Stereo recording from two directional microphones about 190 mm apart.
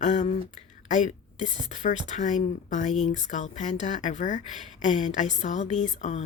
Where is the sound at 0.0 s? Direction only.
40° left (ahead or behind).